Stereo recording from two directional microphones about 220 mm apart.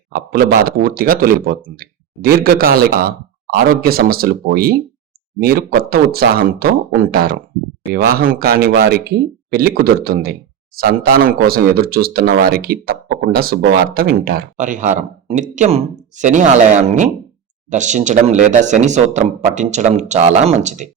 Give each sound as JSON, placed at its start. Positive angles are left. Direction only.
{"t": 0.1, "sound": "speech", "side_deg": -45}